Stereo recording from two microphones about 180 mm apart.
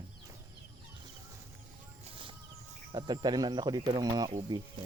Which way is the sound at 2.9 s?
25° right (ahead or behind).